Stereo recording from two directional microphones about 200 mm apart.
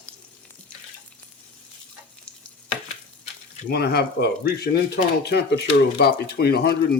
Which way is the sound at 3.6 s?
55° left (ahead or behind).